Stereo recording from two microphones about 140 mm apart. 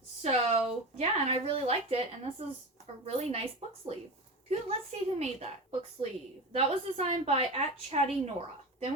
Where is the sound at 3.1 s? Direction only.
45° right (ahead or behind).